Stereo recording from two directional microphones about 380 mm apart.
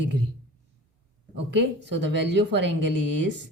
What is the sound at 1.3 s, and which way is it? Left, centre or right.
Speech, right.